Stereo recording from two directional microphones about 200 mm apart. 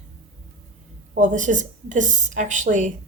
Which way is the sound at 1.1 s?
40° right (ahead or behind).